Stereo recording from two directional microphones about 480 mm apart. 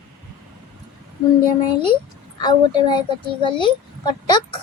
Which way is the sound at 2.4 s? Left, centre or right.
Centre.